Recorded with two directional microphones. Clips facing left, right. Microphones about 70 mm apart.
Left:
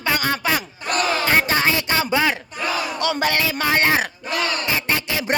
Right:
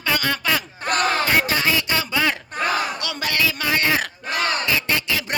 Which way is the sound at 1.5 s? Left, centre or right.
Left.